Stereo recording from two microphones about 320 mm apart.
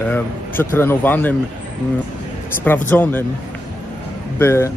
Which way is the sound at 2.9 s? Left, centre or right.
Centre.